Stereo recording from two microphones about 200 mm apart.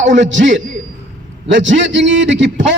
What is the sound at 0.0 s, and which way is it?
A man's voice, 65° right (ahead or behind).